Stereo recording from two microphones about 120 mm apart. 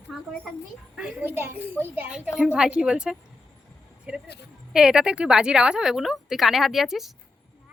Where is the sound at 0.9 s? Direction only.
10° right (ahead or behind).